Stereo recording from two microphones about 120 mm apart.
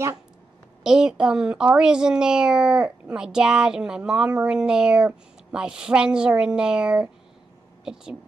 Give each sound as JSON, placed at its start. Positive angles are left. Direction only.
{"t": 0.8, "sound": "speech", "side_deg": -5}